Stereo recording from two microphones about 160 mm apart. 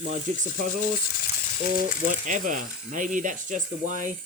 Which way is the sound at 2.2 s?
55° right (ahead or behind).